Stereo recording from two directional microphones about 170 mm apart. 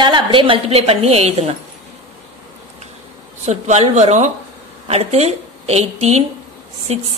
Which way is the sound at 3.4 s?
40° right (ahead or behind).